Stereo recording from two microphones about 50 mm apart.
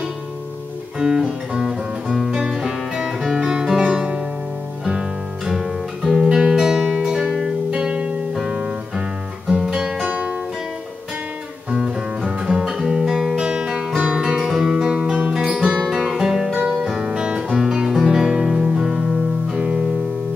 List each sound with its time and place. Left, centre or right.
0.9 s music: centre
5.5 s guitar: centre
6.3 s music: centre
11.7 s music: centre
15.9 s guitar: centre